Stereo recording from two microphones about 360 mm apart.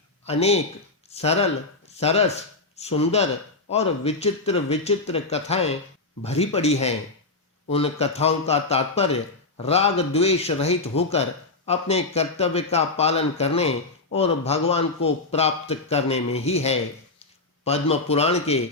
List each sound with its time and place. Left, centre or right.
0.3 s a man's voice: centre